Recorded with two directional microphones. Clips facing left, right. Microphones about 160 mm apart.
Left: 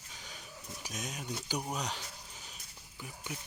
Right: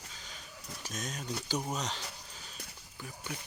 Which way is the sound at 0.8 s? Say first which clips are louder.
Right 2 dB; 15° left (ahead or behind).